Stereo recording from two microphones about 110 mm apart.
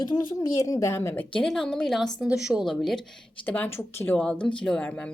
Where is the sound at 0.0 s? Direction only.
40° left (ahead or behind); by 3.0 s centre (ahead or behind).